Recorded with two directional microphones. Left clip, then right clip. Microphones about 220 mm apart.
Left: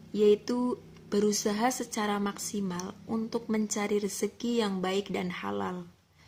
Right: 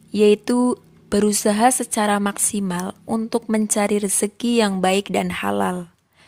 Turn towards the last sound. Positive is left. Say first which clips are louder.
# right 12 dB
turn(degrees=-45)  # may be behind; listen again after turning